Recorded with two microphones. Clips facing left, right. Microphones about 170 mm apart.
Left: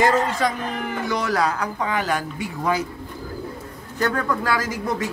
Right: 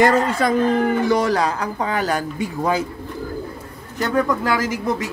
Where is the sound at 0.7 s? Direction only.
30° right (ahead or behind).